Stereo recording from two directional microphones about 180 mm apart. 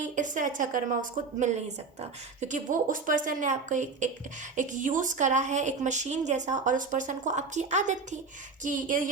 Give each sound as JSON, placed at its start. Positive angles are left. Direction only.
{"t": 0.0, "sound": "a woman's voice", "side_deg": -45}
{"t": 2.0, "sound": "a woman's voice", "side_deg": -40}